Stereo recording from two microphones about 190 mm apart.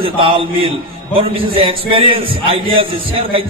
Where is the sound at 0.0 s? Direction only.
30° right (ahead or behind).